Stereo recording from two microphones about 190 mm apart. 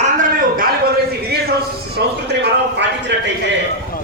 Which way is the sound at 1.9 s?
60° right (ahead or behind).